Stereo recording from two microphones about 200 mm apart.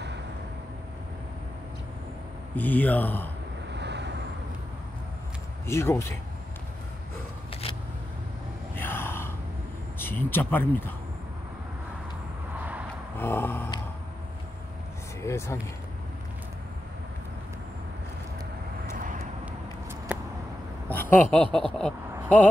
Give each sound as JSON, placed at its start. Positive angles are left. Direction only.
{"t": 2.5, "sound": "speech", "side_deg": 10}
{"t": 3.7, "sound": "vehicle", "side_deg": -60}
{"t": 5.7, "sound": "speech", "side_deg": 15}
{"t": 8.7, "sound": "gasp", "side_deg": 10}
{"t": 9.9, "sound": "speech", "side_deg": 10}
{"t": 13.2, "sound": "speech", "side_deg": 10}
{"t": 15.2, "sound": "speech", "side_deg": 15}
{"t": 20.9, "sound": "a woman's voice", "side_deg": 10}
{"t": 21.5, "sound": "speech", "side_deg": -25}
{"t": 21.7, "sound": "speech", "side_deg": 5}